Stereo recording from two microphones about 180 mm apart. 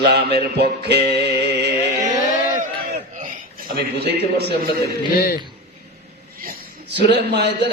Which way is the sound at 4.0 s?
65° right (ahead or behind).